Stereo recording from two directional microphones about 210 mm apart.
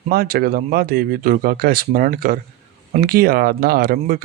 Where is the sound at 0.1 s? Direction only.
45° right (ahead or behind).